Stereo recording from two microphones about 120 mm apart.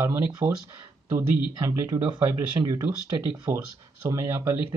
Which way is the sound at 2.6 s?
45° right (ahead or behind).